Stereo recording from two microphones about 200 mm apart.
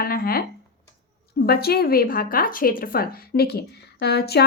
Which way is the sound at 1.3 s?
50° left (ahead or behind).